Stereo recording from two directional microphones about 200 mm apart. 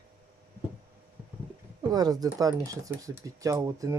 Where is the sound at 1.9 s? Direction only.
20° right (ahead or behind).